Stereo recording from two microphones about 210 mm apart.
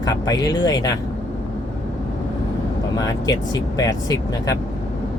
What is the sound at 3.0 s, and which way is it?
Speech, 15° left (ahead or behind).